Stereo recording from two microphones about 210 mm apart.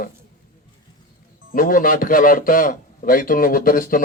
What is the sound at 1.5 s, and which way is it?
A man's voice, 40° left (ahead or behind).